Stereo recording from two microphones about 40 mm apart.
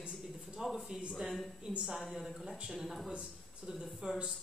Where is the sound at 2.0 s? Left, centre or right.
Centre.